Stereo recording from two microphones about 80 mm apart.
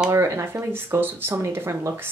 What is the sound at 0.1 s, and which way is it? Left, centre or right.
Speech, right.